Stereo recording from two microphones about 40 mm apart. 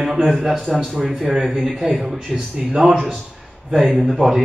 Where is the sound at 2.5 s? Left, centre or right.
Centre.